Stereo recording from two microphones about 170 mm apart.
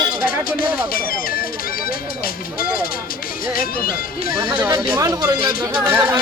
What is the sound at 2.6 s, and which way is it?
Speech, 60° left (ahead or behind).